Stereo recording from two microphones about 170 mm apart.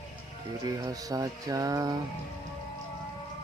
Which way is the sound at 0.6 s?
20° right (ahead or behind).